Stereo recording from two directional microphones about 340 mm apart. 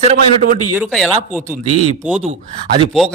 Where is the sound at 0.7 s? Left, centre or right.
Centre.